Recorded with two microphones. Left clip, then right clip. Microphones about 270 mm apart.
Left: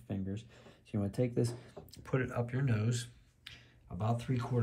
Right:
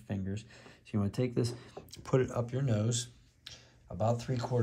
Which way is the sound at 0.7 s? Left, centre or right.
Right.